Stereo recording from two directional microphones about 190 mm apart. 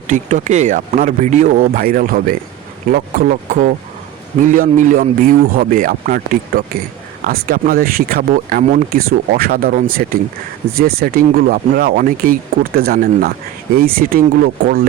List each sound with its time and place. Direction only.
0.1 s speech: 40° right (ahead or behind)